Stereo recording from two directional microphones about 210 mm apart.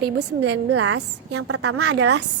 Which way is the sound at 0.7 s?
90° right.